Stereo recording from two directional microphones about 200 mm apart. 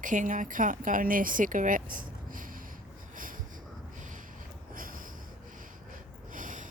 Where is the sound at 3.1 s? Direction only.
45° right (ahead or behind).